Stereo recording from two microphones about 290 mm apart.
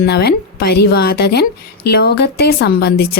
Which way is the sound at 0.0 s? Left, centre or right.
Left.